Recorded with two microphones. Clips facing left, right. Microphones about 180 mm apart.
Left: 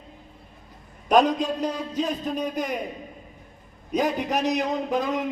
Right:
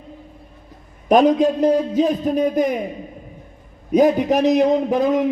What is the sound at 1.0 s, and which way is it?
A man's voice, 50° right (ahead or behind).